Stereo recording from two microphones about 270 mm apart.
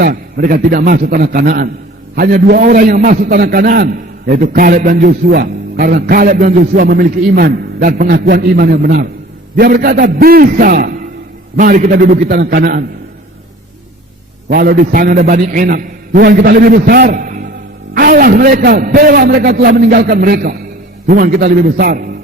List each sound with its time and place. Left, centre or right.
0.0 s a man's voice: right
14.5 s a man's voice: right